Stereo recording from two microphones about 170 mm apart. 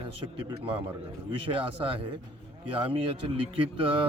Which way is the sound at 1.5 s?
30° right (ahead or behind).